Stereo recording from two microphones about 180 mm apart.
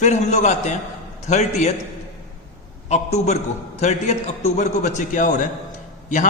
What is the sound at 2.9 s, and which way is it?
A man's voice, 40° left (ahead or behind).